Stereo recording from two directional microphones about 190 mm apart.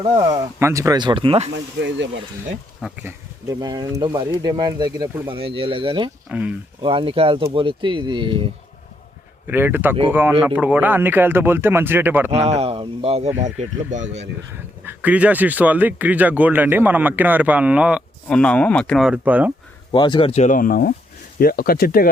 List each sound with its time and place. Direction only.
0.0 s speech: 30° right (ahead or behind)
0.6 s speech: 15° right (ahead or behind)
1.8 s speech: 65° right (ahead or behind)
2.8 s speech: 10° right (ahead or behind); by 6.1 s 25° right (ahead or behind)
6.2 s speech: 5° right (ahead or behind)
6.8 s speech: 30° right (ahead or behind)
9.5 s speech: 10° right (ahead or behind)
12.3 s speech: 35° right (ahead or behind)
14.8 s speech: 10° right (ahead or behind)
19.9 s speech: 25° left (ahead or behind); by 22.1 s 50° left (ahead or behind)